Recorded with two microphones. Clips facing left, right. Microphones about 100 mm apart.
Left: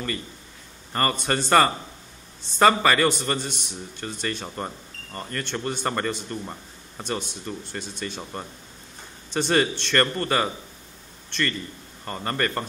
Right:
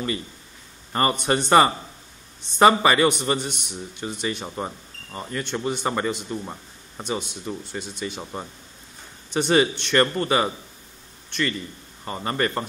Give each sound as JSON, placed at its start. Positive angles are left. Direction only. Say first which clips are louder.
{"t": 0.9, "sound": "a man's voice", "louder": "right 3 dB", "side_deg": -15}
{"t": 12.0, "sound": "a man's voice", "louder": "right 2 dB", "side_deg": -10}